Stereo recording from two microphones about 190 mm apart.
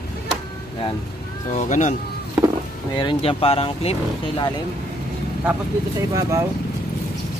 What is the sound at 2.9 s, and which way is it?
Speech, 25° left (ahead or behind).